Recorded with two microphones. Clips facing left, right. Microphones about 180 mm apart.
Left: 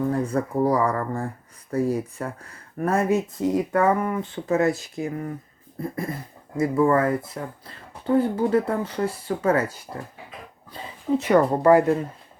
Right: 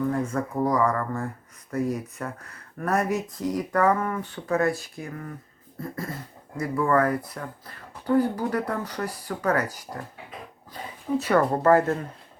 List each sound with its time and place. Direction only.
0.1 s speech: 35° left (ahead or behind)
11.2 s speech: 15° left (ahead or behind)